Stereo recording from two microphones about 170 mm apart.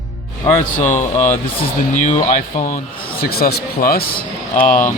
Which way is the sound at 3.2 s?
65° left (ahead or behind).